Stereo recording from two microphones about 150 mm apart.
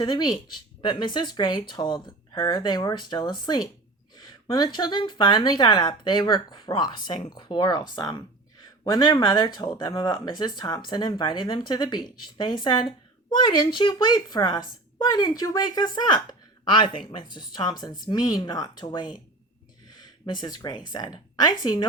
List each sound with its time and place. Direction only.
0.0 s speech: 30° left (ahead or behind)
20.4 s speech: 25° left (ahead or behind)